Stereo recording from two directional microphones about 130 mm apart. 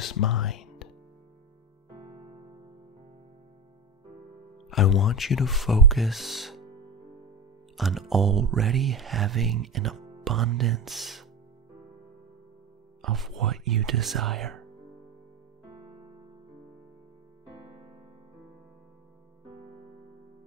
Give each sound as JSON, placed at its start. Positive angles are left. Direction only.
{"t": 0.0, "sound": "music", "side_deg": 0}
{"t": 4.6, "sound": "speech", "side_deg": 0}
{"t": 7.7, "sound": "speech", "side_deg": 0}
{"t": 13.0, "sound": "speech", "side_deg": 0}